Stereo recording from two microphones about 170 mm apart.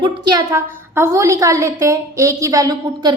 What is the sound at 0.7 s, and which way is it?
A woman's voice, 15° right (ahead or behind).